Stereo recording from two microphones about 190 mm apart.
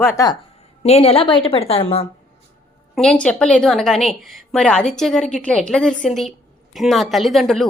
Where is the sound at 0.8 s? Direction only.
30° left (ahead or behind).